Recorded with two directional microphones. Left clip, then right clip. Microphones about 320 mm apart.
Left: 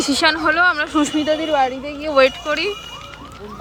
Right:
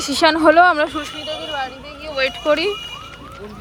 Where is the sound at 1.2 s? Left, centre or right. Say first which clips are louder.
Left 7 dB; left.